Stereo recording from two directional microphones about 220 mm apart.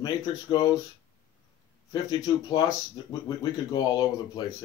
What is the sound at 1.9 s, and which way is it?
Speech, 20° left (ahead or behind).